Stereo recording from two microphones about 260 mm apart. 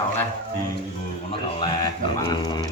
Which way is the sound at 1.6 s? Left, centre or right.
Centre.